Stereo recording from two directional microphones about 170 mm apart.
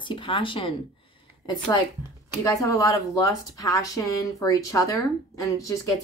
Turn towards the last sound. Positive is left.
turn(degrees=20)  # may be behind; listen again after turning